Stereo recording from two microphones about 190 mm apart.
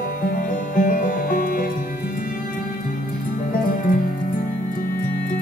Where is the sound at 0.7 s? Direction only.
45° left (ahead or behind).